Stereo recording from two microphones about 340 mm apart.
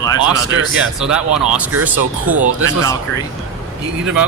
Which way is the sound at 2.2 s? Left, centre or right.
Right.